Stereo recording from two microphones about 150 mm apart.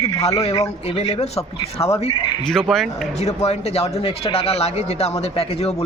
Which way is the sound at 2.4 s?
5° left (ahead or behind).